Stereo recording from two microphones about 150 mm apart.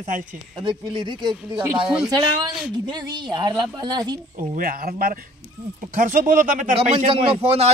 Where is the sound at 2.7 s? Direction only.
30° right (ahead or behind).